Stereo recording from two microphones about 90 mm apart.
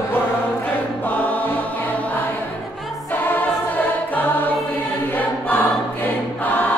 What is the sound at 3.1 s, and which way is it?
Choir, 20° left (ahead or behind).